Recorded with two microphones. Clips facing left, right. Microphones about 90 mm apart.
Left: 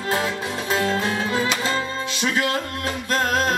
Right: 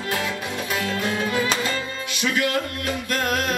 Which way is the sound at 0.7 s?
25° left (ahead or behind).